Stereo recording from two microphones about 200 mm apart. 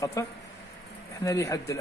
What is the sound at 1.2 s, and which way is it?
Speech, 15° left (ahead or behind).